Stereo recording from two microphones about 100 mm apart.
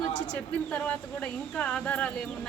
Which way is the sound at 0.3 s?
15° left (ahead or behind).